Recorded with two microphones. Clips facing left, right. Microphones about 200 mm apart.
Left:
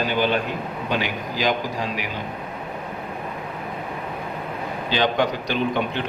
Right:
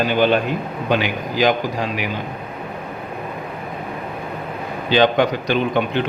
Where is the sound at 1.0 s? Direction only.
65° right (ahead or behind).